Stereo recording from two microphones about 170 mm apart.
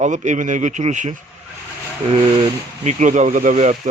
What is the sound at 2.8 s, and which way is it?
Speech, 45° right (ahead or behind).